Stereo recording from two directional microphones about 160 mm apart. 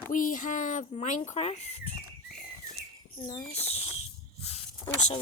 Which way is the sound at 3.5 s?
40° left (ahead or behind).